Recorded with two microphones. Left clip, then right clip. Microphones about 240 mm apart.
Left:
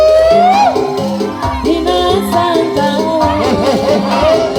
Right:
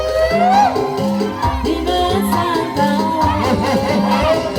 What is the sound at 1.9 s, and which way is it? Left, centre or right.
Music, left.